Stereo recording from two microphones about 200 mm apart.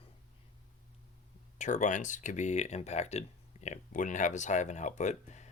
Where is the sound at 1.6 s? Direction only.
40° left (ahead or behind).